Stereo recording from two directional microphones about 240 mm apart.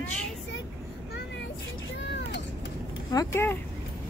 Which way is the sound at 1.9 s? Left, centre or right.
Left.